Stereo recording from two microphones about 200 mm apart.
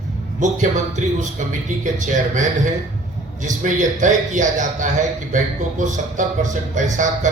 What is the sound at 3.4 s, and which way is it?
Speech, 40° right (ahead or behind).